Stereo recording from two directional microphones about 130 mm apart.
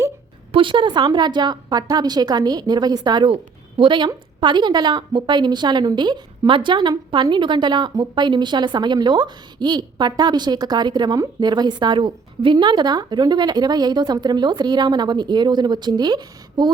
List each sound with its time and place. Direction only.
0.5 s a woman's voice: 40° right (ahead or behind)